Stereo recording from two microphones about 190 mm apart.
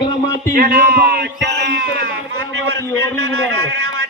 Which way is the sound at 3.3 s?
90° right.